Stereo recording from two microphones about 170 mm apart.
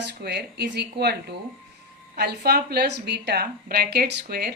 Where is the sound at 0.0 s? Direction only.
70° right (ahead or behind).